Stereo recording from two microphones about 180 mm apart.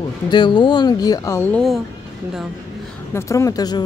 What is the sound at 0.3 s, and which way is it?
Speech, 25° left (ahead or behind).